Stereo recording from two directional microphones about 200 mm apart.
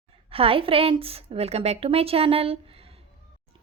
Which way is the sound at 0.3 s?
30° right (ahead or behind).